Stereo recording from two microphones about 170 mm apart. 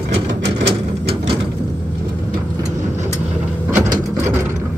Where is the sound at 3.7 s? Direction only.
15° right (ahead or behind).